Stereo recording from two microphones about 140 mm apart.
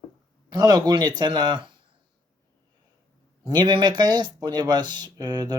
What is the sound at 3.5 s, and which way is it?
Speech, 30° right (ahead or behind).